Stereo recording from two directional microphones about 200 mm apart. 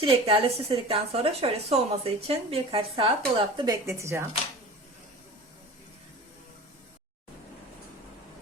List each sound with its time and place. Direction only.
0.0 s a woman's voice: 25° right (ahead or behind)